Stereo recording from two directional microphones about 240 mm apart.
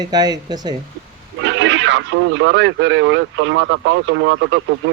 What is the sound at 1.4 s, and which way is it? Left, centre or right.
Speech, right.